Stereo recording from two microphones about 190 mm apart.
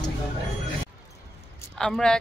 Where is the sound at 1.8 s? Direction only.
5° left (ahead or behind).